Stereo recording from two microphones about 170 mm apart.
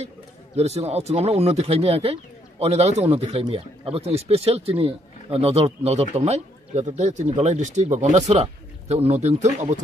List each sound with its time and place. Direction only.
0.6 s speech: 35° right (ahead or behind)